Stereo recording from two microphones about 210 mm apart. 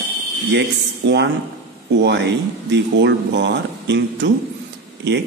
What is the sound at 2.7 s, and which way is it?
A man's voice, 55° right (ahead or behind).